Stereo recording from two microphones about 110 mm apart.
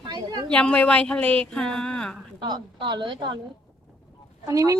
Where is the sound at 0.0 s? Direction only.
35° right (ahead or behind).